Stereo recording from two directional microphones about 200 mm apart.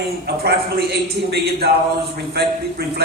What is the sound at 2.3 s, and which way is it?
Speech, 55° right (ahead or behind).